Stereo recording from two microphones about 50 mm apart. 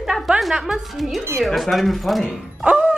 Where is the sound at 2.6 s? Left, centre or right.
Centre.